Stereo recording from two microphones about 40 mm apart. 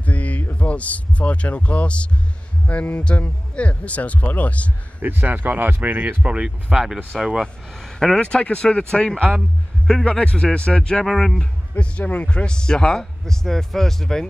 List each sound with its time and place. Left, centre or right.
0.0 s a sound: left
0.6 s speech: left
5.0 s speech: right
6.0 s speech: right
6.7 s speech: centre
7.7 s speech: centre
8.2 s speech: left
11.1 s speech: centre
11.7 s speech: left
12.0 s speech: left
12.3 s speech: left